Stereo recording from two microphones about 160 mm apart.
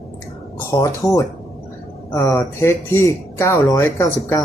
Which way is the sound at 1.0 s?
20° left (ahead or behind).